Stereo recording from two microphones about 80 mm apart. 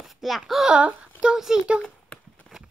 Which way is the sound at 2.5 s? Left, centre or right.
Centre.